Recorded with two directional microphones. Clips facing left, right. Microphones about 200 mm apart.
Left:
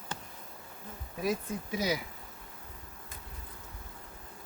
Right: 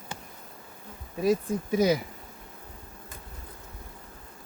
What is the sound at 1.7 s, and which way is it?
Speech, 50° right (ahead or behind).